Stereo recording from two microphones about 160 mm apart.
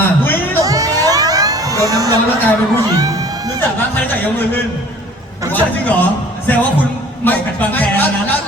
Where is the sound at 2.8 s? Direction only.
25° right (ahead or behind).